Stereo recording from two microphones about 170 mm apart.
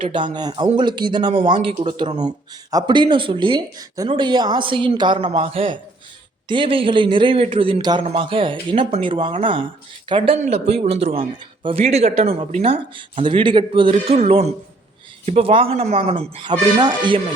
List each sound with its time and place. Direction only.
0.0 s a man's voice: 30° right (ahead or behind)